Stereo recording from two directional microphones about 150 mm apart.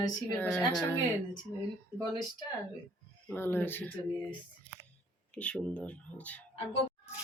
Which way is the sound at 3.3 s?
15° left (ahead or behind).